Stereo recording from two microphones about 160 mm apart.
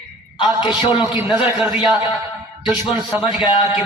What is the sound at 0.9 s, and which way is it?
A man's voice, 10° right (ahead or behind).